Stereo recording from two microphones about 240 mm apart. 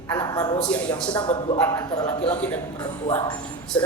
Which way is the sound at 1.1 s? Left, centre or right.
Centre.